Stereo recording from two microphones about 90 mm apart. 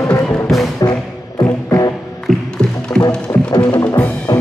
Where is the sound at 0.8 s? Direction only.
45° left (ahead or behind).